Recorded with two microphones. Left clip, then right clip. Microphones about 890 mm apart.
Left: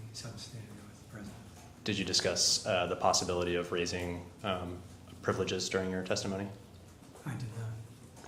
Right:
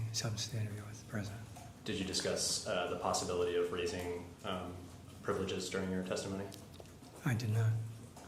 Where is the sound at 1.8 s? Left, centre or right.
Left.